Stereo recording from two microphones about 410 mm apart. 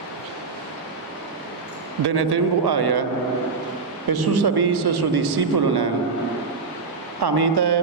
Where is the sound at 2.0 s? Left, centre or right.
Right.